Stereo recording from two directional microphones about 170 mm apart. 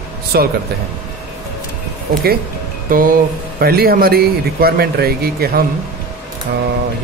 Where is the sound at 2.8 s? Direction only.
55° right (ahead or behind).